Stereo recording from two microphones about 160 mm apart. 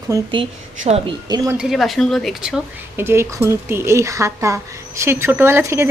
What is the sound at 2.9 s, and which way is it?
A woman's voice, 15° right (ahead or behind).